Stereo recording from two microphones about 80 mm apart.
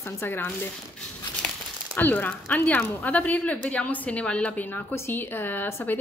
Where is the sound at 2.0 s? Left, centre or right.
Left.